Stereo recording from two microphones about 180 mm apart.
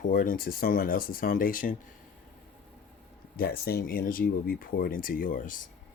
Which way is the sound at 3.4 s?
60° left (ahead or behind).